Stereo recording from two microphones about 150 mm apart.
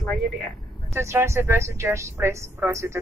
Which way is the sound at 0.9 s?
20° right (ahead or behind).